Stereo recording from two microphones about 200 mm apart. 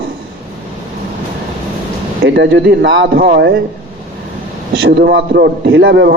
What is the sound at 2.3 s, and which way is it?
A man's voice, 60° right (ahead or behind).